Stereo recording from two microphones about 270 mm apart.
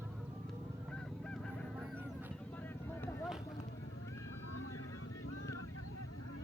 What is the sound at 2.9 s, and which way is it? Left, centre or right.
Vehicle, centre.